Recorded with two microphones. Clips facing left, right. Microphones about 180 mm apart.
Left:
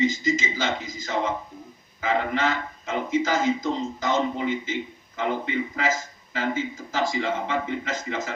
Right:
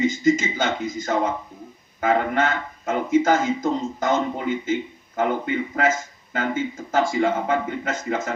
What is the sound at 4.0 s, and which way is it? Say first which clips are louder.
Speech: right 2 dB; 50° right (ahead or behind).